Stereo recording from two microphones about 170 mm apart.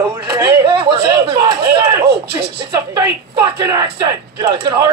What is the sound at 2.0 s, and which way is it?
Speech, 75° right (ahead or behind).